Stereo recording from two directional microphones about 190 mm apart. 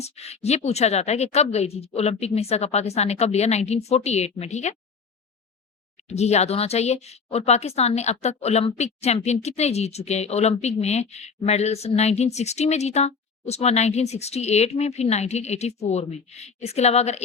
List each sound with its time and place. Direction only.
0.0 s speech: 35° left (ahead or behind)
6.1 s speech: 35° left (ahead or behind)